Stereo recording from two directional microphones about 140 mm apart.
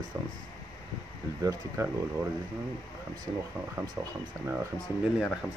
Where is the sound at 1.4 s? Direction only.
25° right (ahead or behind).